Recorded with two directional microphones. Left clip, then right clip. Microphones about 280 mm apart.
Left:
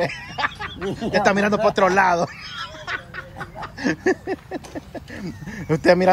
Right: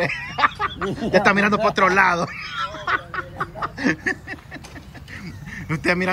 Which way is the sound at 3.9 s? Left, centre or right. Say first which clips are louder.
Left 4 dB; left.